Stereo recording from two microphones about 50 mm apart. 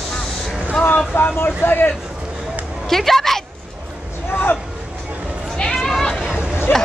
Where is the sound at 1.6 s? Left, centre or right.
Left.